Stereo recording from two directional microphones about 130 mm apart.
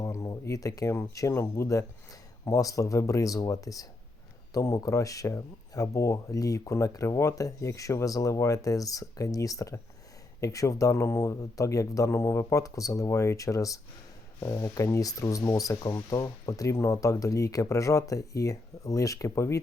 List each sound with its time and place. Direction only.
0.0 s speech: 25° left (ahead or behind)